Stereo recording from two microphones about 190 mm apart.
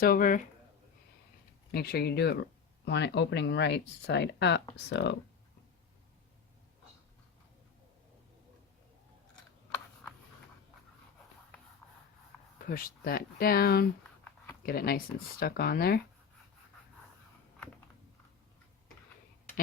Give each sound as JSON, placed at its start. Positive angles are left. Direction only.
{"t": 0.0, "sound": "speech", "side_deg": 50}
{"t": 1.7, "sound": "speech", "side_deg": 55}
{"t": 9.7, "sound": "a sound", "side_deg": 10}
{"t": 11.8, "sound": "writing", "side_deg": 5}
{"t": 12.5, "sound": "speech", "side_deg": 50}